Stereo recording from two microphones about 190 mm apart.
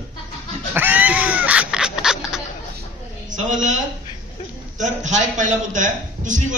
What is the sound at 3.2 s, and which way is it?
A man's voice, 40° right (ahead or behind).